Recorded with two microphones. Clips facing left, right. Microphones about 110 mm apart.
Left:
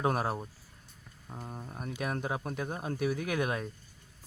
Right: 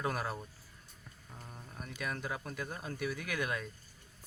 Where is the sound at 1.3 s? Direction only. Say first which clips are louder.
Left 8 dB; 35° left (ahead or behind).